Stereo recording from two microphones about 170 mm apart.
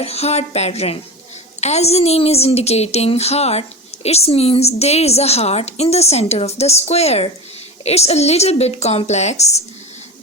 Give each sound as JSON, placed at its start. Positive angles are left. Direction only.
{"t": 0.0, "sound": "a woman's voice", "side_deg": 40}